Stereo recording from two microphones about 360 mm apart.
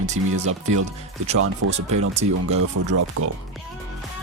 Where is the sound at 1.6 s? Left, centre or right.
Right.